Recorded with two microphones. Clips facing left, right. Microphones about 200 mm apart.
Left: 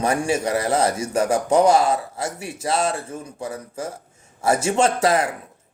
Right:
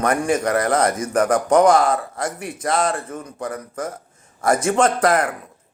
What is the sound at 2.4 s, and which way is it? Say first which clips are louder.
Speech: right 1 dB; 25° left (ahead or behind).